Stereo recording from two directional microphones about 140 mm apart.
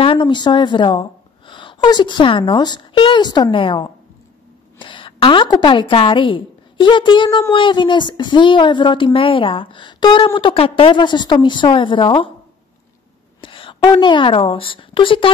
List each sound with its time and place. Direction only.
0.0 s a woman's voice: 35° left (ahead or behind)
13.4 s a woman's voice: 35° left (ahead or behind)